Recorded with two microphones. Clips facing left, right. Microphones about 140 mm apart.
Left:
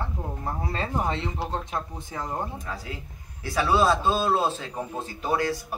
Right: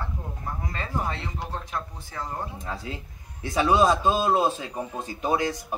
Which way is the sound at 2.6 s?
25° right (ahead or behind).